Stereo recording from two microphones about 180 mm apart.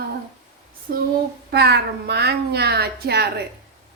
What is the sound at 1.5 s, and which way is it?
A woman's voice, 65° right (ahead or behind).